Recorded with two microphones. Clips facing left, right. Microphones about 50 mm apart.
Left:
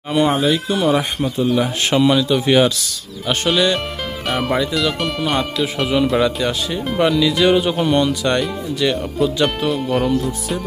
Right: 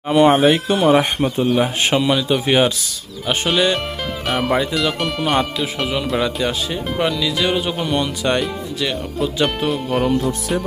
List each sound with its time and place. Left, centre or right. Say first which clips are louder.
0.3 s speech: right 3 dB; right
0.8 s speech: right 3 dB; right
2.0 s speech: left 5 dB; centre
4.3 s speech: even; centre